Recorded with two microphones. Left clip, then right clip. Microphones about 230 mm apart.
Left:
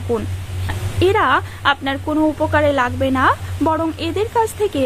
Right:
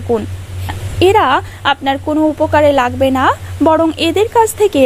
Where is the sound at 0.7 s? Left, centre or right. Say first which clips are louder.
Right 6 dB; right.